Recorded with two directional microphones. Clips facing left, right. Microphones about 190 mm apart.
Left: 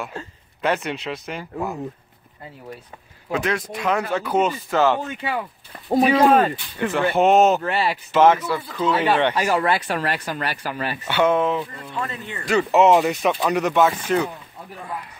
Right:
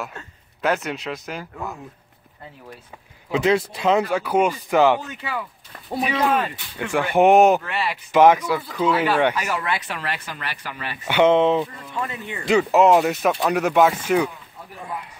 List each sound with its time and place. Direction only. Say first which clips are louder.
0.6 s speech: even; centre (ahead or behind)
3.3 s speech: right 4 dB; 25° right (ahead or behind)
4.1 s speech: right 1 dB; 10° right (ahead or behind)
5.2 s speech: left 4 dB; 30° left (ahead or behind)
5.9 s speech: left 6 dB; 40° left (ahead or behind)
6.9 s speech: right 2 dB; 15° right (ahead or behind)
7.6 s speech: left 4 dB; 35° left (ahead or behind)
8.1 s speech: right 2 dB; 15° right (ahead or behind)
9.3 s speech: left 5 dB; 30° left (ahead or behind)
11.1 s speech: right 3 dB; 20° right (ahead or behind)
12.0 s speech: right 1 dB; 15° right (ahead or behind)
12.7 s speech: left 1 dB; centre (ahead or behind)